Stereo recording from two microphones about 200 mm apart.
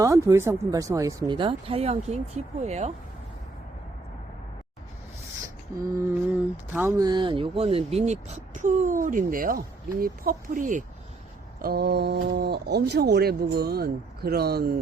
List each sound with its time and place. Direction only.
0.0 s speech: 15° right (ahead or behind); by 2.9 s 35° right (ahead or behind)
5.8 s speech: 10° right (ahead or behind); by 10.8 s 40° right (ahead or behind)
11.6 s speech: 50° right (ahead or behind)